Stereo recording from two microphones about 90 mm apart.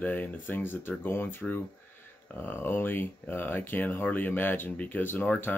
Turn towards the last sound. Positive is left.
turn(degrees=20)  # may be behind; listen again after turning